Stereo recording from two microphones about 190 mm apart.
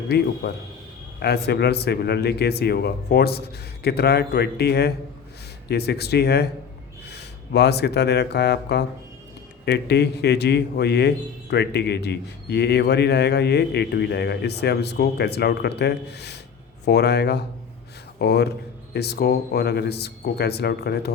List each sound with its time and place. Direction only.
0.4 s a man's voice: 60° left (ahead or behind)